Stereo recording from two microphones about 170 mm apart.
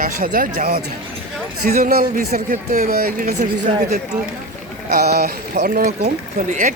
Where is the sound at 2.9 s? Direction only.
65° right (ahead or behind).